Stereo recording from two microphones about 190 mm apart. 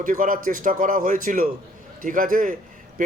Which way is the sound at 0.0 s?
45° right (ahead or behind).